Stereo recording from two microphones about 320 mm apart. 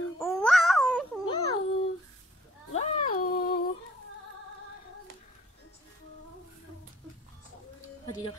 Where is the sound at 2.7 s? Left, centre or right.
Left.